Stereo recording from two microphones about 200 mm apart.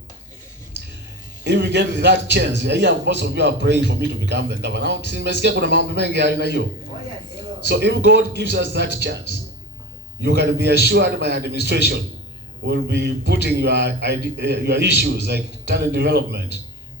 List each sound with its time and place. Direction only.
1.5 s a man's voice: 60° right (ahead or behind)
7.7 s a man's voice: 55° right (ahead or behind)
10.2 s a man's voice: 55° right (ahead or behind)